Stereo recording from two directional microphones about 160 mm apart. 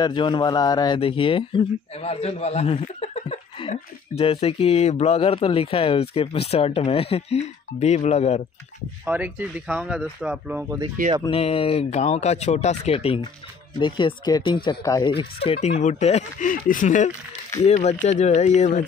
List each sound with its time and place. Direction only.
0.0 s speech: 30° left (ahead or behind); by 8.4 s 45° left (ahead or behind)
9.0 s speech: 10° right (ahead or behind)
11.2 s speech: 35° left (ahead or behind)